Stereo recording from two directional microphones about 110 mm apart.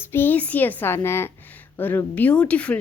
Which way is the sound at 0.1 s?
20° left (ahead or behind).